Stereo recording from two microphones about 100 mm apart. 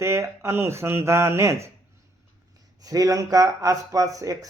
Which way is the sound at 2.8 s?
35° right (ahead or behind).